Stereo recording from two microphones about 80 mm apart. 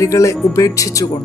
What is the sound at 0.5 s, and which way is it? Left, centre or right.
Speech, left.